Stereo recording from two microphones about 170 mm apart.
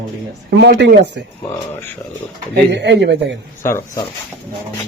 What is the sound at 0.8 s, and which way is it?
Speech, 90° right.